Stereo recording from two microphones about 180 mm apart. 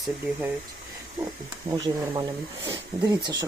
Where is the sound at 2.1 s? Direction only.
20° right (ahead or behind).